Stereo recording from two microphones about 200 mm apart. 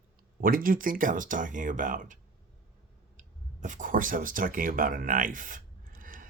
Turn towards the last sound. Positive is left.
turn(degrees=-45)  # may be behind; listen again after turning